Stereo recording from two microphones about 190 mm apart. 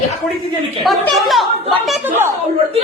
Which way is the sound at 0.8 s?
Centre (ahead or behind).